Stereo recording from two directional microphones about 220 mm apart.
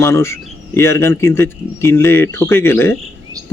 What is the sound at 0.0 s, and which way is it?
A man's voice, 10° left (ahead or behind).